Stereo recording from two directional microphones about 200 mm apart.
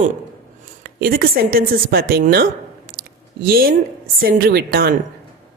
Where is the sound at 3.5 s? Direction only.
50° right (ahead or behind).